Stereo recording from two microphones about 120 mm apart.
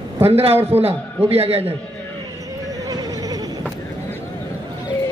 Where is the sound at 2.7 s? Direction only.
30° right (ahead or behind).